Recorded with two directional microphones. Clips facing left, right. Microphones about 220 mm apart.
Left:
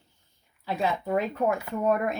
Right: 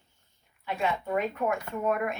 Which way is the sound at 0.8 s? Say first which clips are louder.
Left 2 dB; 30° left (ahead or behind).